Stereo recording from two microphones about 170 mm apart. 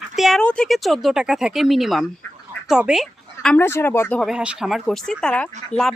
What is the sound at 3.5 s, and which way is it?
Speech, 15° left (ahead or behind).